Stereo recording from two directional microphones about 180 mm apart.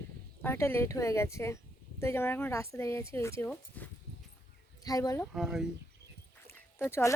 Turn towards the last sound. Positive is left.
turn(degrees=15)  # may be behind; listen again after turning